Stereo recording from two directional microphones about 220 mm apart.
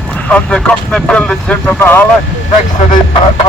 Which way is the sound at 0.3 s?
5° left (ahead or behind).